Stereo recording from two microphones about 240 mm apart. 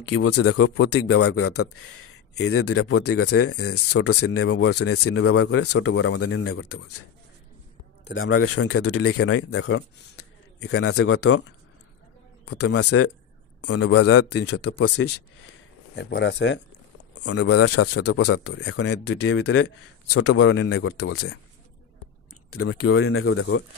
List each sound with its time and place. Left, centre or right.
0.0 s speech: left
4.2 s speech: left
4.7 s speech: left
8.0 s speech: left
10.8 s speech: left
11.2 s speech: left
12.6 s speech: left
14.6 s speech: left
17.1 s a sound: left
17.7 s speech: left
18.1 s speech: left
22.5 s speech: left